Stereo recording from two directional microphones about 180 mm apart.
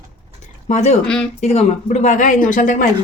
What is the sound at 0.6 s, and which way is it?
Speech, 40° left (ahead or behind).